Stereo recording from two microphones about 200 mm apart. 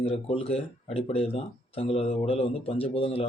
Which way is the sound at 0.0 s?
30° left (ahead or behind).